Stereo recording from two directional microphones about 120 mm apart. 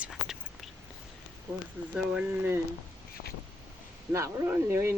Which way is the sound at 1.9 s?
10° right (ahead or behind).